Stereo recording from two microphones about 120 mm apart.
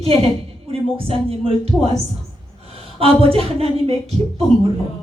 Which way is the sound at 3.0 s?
50° right (ahead or behind).